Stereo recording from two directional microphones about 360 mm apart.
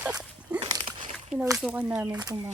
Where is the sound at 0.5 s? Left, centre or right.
Centre.